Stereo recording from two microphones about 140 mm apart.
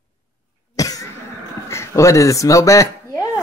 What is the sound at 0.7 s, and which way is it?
Cough, 25° left (ahead or behind).